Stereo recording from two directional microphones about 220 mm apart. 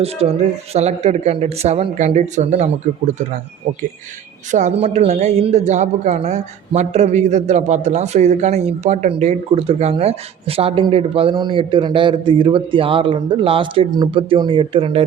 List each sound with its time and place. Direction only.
0.2 s a man's voice: 30° right (ahead or behind)
4.5 s a man's voice: 30° right (ahead or behind)